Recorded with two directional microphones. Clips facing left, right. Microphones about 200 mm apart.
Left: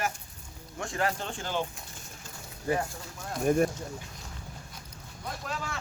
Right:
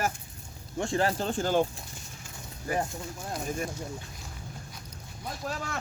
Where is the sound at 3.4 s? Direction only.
60° left (ahead or behind).